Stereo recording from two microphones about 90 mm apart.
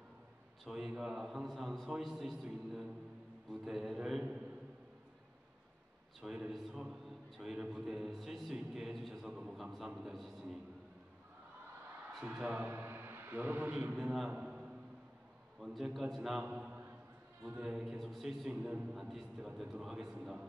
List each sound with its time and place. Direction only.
0.7 s a man's voice: 5° right (ahead or behind)
6.5 s a man's voice: 5° right (ahead or behind)
8.5 s a sound: 5° right (ahead or behind)
12.1 s a man's voice: 5° right (ahead or behind)
13.9 s a man's voice: 5° right (ahead or behind)
17.8 s a man's voice: centre (ahead or behind)
18.5 s a man's voice: 15° right (ahead or behind)
18.9 s a man's voice: centre (ahead or behind)